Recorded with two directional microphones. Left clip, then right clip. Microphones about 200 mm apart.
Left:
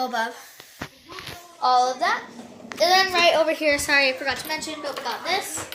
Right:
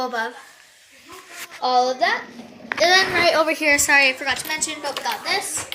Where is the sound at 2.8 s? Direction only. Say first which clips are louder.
Right 2 dB; 40° right (ahead or behind); by 3.7 s 25° right (ahead or behind).